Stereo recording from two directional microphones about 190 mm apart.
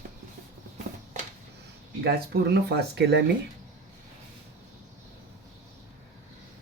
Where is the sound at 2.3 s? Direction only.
60° right (ahead or behind).